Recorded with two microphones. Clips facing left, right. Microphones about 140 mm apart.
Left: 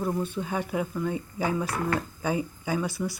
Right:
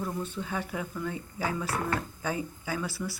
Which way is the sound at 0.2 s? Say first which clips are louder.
Left 4 dB; 20° left (ahead or behind).